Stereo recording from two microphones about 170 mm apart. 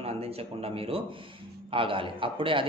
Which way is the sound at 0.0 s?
35° right (ahead or behind).